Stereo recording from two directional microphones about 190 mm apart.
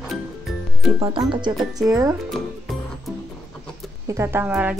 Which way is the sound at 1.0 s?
25° right (ahead or behind).